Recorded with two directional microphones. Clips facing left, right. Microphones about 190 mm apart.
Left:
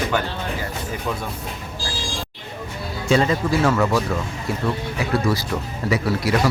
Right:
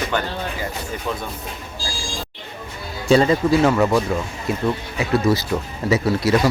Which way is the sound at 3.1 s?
35° right (ahead or behind).